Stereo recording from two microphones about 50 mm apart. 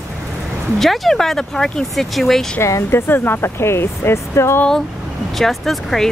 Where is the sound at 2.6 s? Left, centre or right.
Left.